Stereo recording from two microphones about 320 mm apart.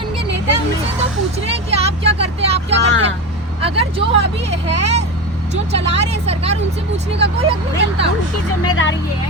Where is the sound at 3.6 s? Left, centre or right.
Centre.